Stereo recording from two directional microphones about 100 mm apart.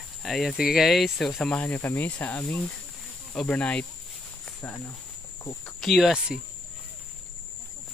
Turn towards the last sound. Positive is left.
turn(degrees=-5)  # may be behind; listen again after turning